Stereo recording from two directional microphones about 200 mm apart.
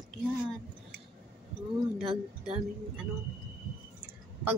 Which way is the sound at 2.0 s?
30° right (ahead or behind).